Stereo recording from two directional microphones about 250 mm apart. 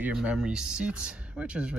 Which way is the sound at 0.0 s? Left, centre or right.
Centre.